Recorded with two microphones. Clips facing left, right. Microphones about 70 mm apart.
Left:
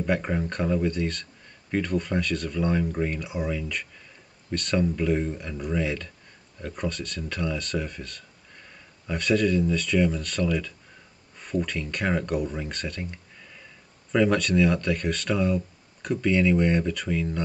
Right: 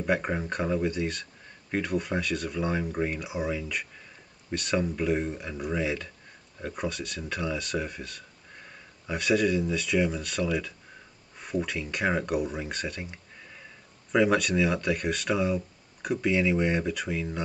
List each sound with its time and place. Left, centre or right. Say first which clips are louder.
0.0 s speech: left 1 dB; centre